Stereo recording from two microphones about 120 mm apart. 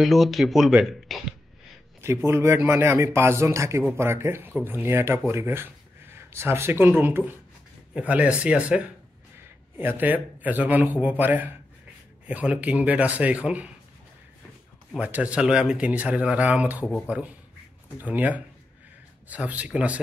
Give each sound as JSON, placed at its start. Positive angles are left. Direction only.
{"t": 0.0, "sound": "speech", "side_deg": 0}
{"t": 2.0, "sound": "a man's voice", "side_deg": -20}
{"t": 15.0, "sound": "speech", "side_deg": -10}
{"t": 16.8, "sound": "speech", "side_deg": 10}
{"t": 17.1, "sound": "speech", "side_deg": -10}